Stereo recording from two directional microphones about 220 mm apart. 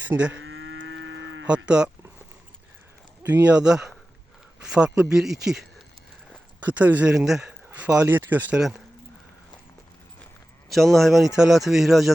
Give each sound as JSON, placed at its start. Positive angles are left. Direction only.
{"t": 0.0, "sound": "speech", "side_deg": -5}
{"t": 0.3, "sound": "cattle", "side_deg": -60}
{"t": 1.5, "sound": "speech", "side_deg": -5}
{"t": 3.4, "sound": "speech", "side_deg": -5}
{"t": 10.7, "sound": "speech", "side_deg": 0}